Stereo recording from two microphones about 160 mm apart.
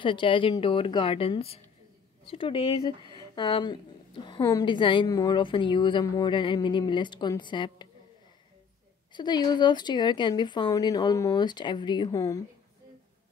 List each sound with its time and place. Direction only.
0.0 s a woman's voice: 30° left (ahead or behind)
4.6 s a woman's voice: 30° left (ahead or behind)
9.1 s a woman's voice: 25° left (ahead or behind)